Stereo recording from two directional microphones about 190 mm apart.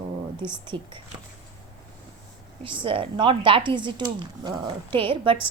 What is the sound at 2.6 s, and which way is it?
Speech, 25° right (ahead or behind).